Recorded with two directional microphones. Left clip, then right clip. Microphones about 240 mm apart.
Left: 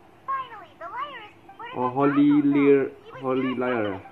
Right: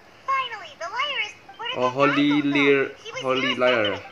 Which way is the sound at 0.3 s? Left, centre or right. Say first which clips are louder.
Right 5 dB; centre.